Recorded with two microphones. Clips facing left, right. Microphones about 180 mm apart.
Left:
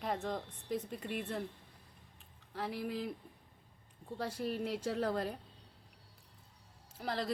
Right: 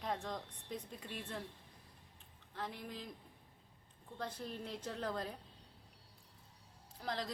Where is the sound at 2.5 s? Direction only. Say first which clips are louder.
Left 5 dB; 10° left (ahead or behind).